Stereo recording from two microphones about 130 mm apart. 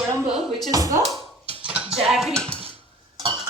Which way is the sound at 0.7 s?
30° right (ahead or behind).